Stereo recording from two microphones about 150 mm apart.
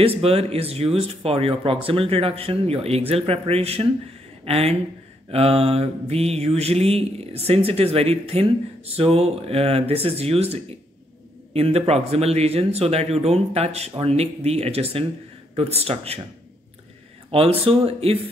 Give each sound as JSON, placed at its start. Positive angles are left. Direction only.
{"t": 0.2, "sound": "mantra", "side_deg": -40}
{"t": 4.5, "sound": "speech", "side_deg": -40}
{"t": 5.3, "sound": "mantra", "side_deg": -40}
{"t": 11.5, "sound": "speech", "side_deg": -40}
{"t": 15.5, "sound": "mantra", "side_deg": -40}
{"t": 17.3, "sound": "mantra", "side_deg": -40}